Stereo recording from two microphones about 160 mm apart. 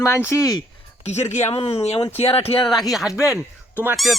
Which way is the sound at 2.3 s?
35° left (ahead or behind).